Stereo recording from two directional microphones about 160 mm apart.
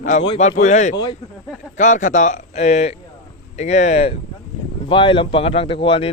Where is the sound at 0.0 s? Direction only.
50° left (ahead or behind).